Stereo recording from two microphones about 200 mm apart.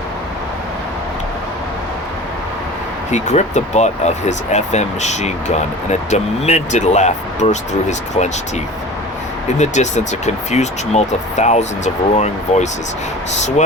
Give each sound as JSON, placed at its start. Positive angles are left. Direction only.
{"t": 3.1, "sound": "speech", "side_deg": 35}
{"t": 9.6, "sound": "speech", "side_deg": 35}